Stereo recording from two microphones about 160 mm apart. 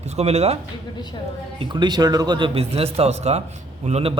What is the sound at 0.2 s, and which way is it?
Speech, 40° right (ahead or behind).